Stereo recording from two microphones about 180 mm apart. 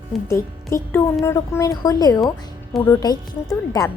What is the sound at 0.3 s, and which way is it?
A woman's voice, 15° left (ahead or behind).